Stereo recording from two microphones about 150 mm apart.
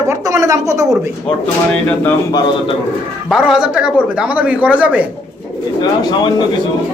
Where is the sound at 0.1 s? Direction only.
20° right (ahead or behind).